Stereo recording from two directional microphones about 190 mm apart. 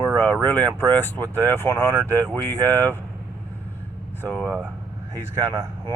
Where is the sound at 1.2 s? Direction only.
20° right (ahead or behind).